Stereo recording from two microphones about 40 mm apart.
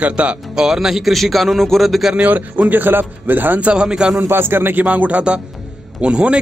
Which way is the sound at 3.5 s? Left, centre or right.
Right.